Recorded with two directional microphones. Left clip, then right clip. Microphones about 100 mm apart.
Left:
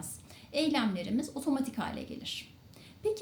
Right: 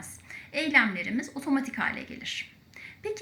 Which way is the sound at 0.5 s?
25° left (ahead or behind).